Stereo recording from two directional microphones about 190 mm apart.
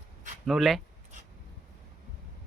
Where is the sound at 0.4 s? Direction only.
Centre (ahead or behind).